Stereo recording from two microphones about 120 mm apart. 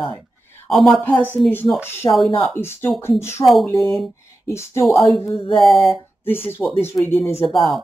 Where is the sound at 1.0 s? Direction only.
15° left (ahead or behind).